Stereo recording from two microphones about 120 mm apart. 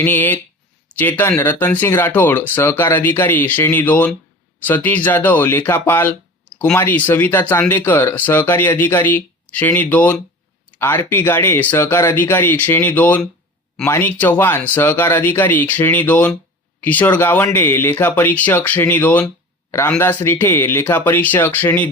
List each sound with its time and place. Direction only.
0.0 s speech: 15° left (ahead or behind)